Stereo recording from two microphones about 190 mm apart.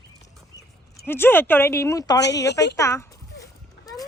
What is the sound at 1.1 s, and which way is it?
Speech, 10° left (ahead or behind).